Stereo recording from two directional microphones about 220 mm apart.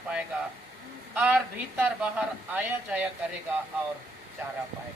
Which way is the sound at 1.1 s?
5° right (ahead or behind).